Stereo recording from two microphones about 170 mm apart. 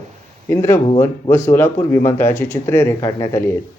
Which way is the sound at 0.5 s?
15° left (ahead or behind).